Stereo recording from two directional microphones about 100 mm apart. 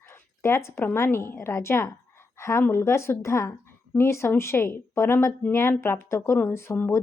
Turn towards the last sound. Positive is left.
turn(degrees=25)  # may be behind; listen again after turning